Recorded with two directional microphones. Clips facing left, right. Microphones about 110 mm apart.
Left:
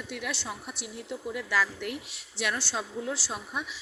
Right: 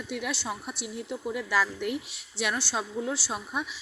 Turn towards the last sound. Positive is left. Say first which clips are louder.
# right 3 dB
turn(degrees=-20)  # may be behind; listen again after turning